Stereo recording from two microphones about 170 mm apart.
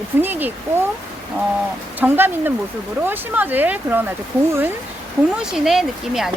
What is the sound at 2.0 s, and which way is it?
Speech, 10° right (ahead or behind).